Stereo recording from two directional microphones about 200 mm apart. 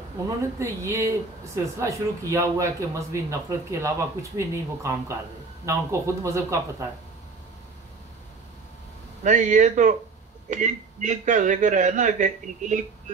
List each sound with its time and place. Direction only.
0.6 s speech: 15° right (ahead or behind)
9.2 s a man's voice: 40° right (ahead or behind)